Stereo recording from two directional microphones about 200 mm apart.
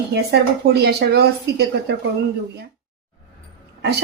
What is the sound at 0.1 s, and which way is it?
Speech, 55° right (ahead or behind).